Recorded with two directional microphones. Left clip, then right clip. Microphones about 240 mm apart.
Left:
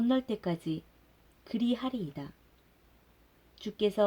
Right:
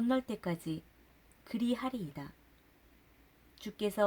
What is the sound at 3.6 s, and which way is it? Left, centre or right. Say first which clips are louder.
Speech: left 6 dB; right.